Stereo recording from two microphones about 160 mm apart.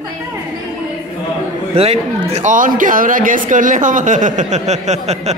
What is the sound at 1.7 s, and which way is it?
Speech, 40° right (ahead or behind).